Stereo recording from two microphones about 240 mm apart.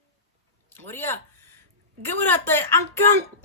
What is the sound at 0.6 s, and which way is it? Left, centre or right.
Speech, centre.